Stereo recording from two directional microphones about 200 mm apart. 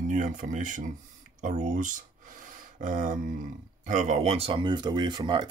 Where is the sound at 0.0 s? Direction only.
40° right (ahead or behind).